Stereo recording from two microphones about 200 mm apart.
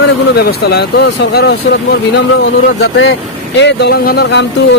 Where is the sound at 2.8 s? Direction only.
65° left (ahead or behind).